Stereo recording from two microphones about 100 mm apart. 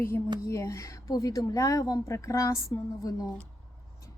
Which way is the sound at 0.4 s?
30° left (ahead or behind).